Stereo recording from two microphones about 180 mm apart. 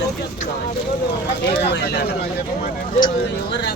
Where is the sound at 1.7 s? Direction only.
65° left (ahead or behind).